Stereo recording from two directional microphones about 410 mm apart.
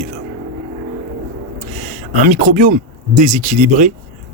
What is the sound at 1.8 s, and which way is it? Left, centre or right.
Speech, centre.